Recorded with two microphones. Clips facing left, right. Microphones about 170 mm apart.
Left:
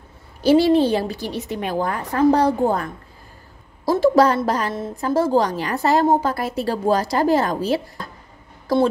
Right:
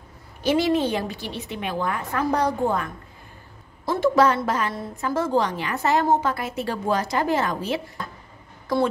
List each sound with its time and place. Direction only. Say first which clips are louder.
0.4 s a woman's voice: left 6 dB; 35° left (ahead or behind)